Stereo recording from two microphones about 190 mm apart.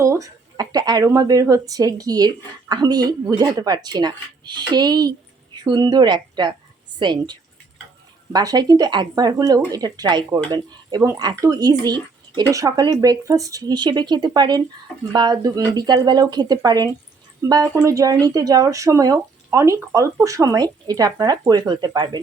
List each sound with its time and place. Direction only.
0.0 s speech: 15° right (ahead or behind)